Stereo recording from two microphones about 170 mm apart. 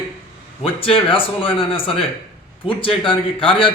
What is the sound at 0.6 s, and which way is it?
Speech, 35° left (ahead or behind).